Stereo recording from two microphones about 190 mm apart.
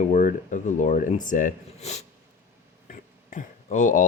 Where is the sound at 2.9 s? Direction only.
40° left (ahead or behind).